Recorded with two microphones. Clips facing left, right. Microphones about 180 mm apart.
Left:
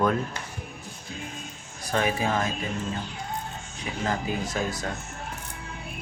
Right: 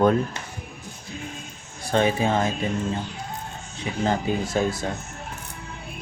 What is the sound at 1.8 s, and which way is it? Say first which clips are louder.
Speech: right 5 dB; 25° right (ahead or behind).